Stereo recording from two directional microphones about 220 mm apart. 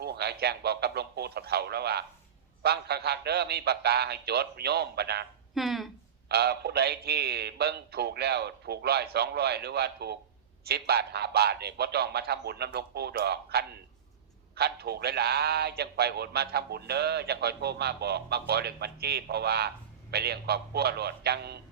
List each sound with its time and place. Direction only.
0.0 s speech: 50° right (ahead or behind)
5.5 s speech: centre (ahead or behind)
6.2 s speech: 45° right (ahead or behind)